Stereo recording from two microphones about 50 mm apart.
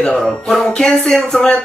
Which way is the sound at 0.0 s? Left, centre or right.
Centre.